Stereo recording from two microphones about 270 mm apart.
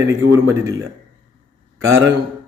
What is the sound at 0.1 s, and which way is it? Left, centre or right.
Speech, centre.